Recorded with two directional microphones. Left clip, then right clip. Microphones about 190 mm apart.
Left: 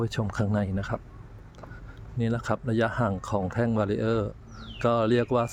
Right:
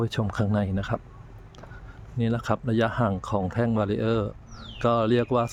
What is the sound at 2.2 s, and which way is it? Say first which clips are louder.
Speech: right 2 dB; 15° right (ahead or behind).